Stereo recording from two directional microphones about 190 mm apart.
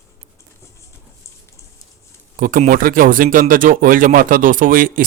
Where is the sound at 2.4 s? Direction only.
45° right (ahead or behind).